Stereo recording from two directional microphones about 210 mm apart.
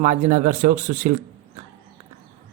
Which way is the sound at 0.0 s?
35° right (ahead or behind).